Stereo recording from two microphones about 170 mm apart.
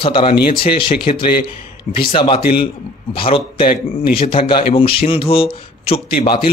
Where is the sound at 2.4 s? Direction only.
65° left (ahead or behind).